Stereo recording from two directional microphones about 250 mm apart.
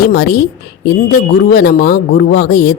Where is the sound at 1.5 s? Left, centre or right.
Left.